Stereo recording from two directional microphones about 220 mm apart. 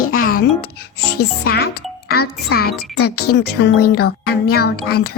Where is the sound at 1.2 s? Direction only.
45° left (ahead or behind).